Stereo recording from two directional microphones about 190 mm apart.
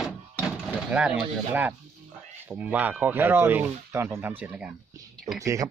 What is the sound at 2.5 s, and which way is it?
Speech, 5° right (ahead or behind).